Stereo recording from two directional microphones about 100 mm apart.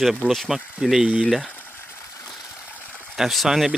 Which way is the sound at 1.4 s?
20° left (ahead or behind).